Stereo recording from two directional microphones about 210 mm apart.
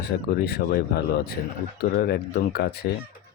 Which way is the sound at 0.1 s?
50° left (ahead or behind).